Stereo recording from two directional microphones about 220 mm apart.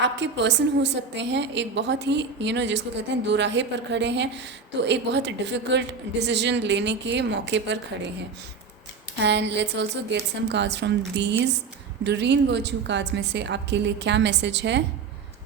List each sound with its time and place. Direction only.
0.0 s a woman's voice: 55° right (ahead or behind)
9.2 s a woman's voice: 50° right (ahead or behind)